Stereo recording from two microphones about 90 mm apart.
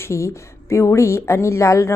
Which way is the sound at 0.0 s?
30° left (ahead or behind).